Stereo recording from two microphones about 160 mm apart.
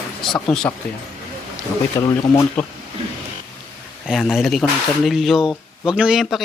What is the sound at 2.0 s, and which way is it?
Speech, 20° left (ahead or behind).